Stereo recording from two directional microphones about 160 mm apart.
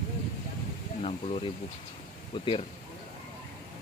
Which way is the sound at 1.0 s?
35° left (ahead or behind).